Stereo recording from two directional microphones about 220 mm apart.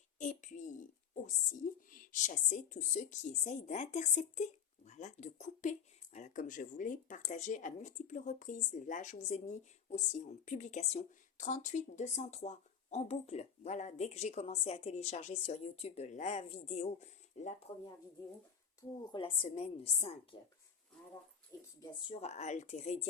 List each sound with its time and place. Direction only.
0.2 s a sound: 35° left (ahead or behind)
1.1 s speech: 35° left (ahead or behind)
18.8 s a woman's voice: 20° left (ahead or behind)
21.8 s speech: 20° left (ahead or behind)